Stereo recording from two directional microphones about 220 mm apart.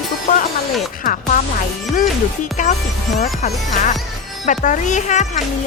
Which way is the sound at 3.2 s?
35° left (ahead or behind).